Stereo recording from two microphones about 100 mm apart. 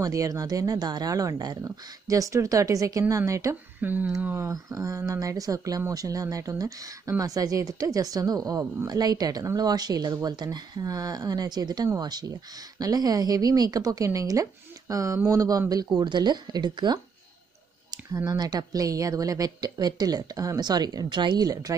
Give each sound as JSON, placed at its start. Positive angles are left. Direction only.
{"t": 0.0, "sound": "speech", "side_deg": -35}
{"t": 3.8, "sound": "speech", "side_deg": -20}
{"t": 4.5, "sound": "speech", "side_deg": -35}
{"t": 16.0, "sound": "speech", "side_deg": -45}
{"t": 18.1, "sound": "speech", "side_deg": -40}